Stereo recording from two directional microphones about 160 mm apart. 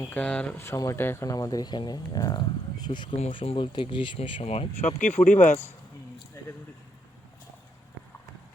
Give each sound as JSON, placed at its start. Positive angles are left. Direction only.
{"t": 0.1, "sound": "speech", "side_deg": 10}
{"t": 3.2, "sound": "speech", "side_deg": 40}
{"t": 4.4, "sound": "speech", "side_deg": 40}